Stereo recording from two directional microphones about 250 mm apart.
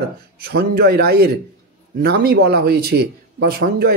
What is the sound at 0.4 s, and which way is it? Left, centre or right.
Speech, right.